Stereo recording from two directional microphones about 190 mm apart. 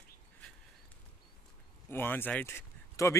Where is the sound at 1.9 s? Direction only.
10° left (ahead or behind).